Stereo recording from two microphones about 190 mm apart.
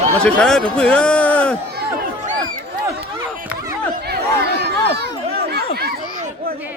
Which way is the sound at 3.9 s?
55° right (ahead or behind).